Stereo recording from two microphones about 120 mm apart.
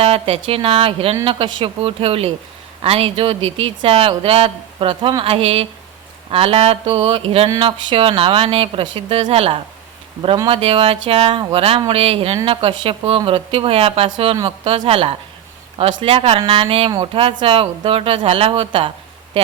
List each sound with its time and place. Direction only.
0.0 s speech: 50° right (ahead or behind)
15.8 s speech: 45° right (ahead or behind)